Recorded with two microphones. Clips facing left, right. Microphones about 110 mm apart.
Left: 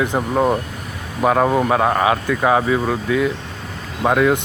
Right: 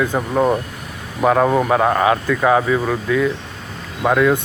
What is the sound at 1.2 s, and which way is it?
Speech, 10° right (ahead or behind).